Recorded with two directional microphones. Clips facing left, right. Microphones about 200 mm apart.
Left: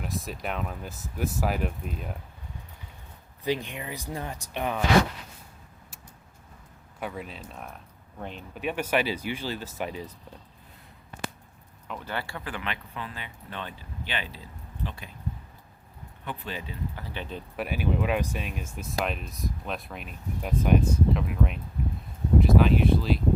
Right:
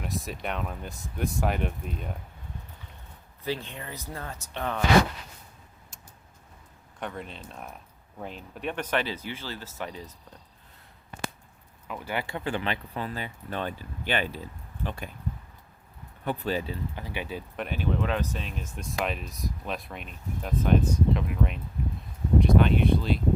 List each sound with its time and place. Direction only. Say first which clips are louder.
0.0 s speech: even; centre (ahead or behind)
3.4 s speech: left 4 dB; 15° left (ahead or behind)
7.0 s speech: left 1 dB; 5° left (ahead or behind)
11.9 s speech: right 2 dB; 10° right (ahead or behind); by 15.1 s 50° right (ahead or behind)
16.2 s speech: right 7 dB; 40° right (ahead or behind)
16.9 s speech: right 2 dB; 15° right (ahead or behind)
17.6 s speech: left 2 dB; 5° left (ahead or behind)